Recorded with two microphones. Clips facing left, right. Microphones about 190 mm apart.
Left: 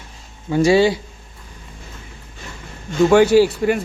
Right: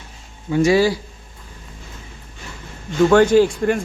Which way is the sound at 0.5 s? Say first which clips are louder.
Left 1 dB; 30° left (ahead or behind).